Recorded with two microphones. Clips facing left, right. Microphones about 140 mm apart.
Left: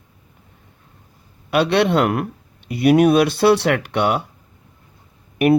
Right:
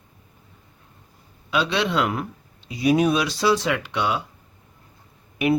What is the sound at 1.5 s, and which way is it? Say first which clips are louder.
Speech: left 7 dB; 60° left (ahead or behind).